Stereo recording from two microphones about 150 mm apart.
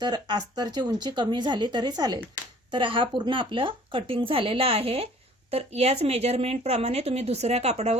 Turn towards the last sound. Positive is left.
turn(degrees=-45)  # may be behind; listen again after turning